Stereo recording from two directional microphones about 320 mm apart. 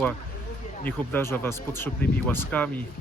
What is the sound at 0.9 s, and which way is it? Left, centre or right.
Speech, centre.